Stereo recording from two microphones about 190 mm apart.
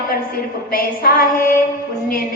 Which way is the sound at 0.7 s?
50° left (ahead or behind).